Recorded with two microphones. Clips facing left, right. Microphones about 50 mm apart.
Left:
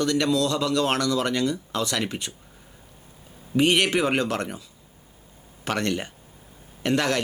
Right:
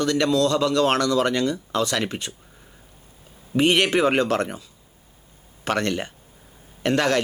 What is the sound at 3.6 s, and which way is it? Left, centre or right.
Speech, right.